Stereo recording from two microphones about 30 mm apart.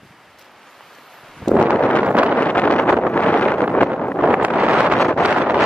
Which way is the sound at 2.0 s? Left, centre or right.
Right.